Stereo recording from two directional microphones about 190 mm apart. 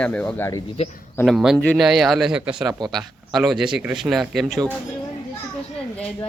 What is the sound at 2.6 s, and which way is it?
Speech, 20° right (ahead or behind).